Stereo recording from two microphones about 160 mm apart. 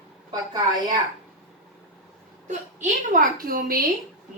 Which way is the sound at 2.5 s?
55° right (ahead or behind).